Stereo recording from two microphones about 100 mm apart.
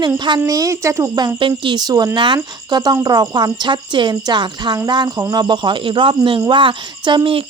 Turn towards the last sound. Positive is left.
turn(degrees=-55)  # may be behind; listen again after turning